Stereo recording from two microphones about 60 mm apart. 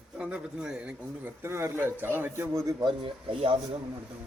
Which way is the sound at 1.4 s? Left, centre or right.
Right.